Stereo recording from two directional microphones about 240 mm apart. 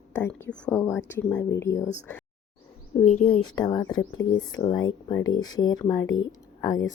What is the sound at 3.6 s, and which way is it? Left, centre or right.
A woman's voice, centre.